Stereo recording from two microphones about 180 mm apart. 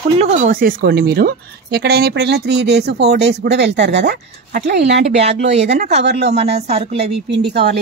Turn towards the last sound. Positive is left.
turn(degrees=-65)  # may be behind; listen again after turning